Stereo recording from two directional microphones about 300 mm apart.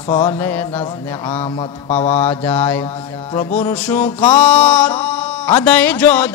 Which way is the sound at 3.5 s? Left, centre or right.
Centre.